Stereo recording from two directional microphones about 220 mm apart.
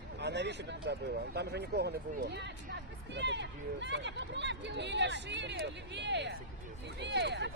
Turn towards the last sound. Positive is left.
turn(degrees=-50)  # may be behind; listen again after turning